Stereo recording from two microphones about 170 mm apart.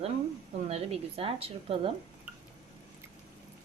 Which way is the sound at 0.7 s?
35° right (ahead or behind).